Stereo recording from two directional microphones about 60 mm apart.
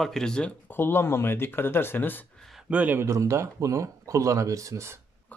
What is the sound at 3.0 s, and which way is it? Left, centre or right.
Speech, right.